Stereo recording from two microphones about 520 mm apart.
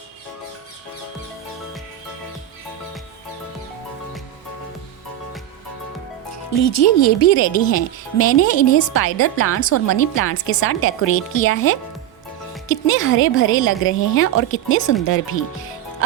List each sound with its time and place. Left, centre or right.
6.3 s speech: left